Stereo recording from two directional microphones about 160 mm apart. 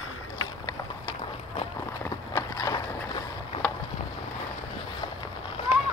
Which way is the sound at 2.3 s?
20° left (ahead or behind).